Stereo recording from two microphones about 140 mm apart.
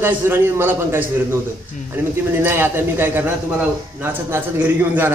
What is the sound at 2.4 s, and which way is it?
A man's voice, 15° right (ahead or behind).